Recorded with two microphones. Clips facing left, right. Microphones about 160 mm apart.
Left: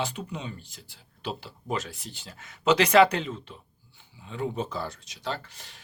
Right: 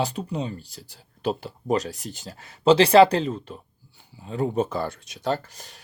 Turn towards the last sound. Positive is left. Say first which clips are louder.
# right 8 dB
turn(degrees=-45)  # may be behind; listen again after turning